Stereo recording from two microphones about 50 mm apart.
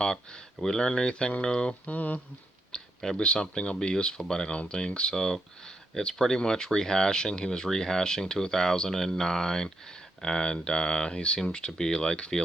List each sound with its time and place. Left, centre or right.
0.6 s speech: centre
1.9 s speech: left
2.7 s a sound: centre
3.3 s speech: centre